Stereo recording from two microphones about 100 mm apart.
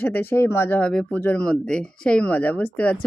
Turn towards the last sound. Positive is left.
turn(degrees=15)  # may be behind; listen again after turning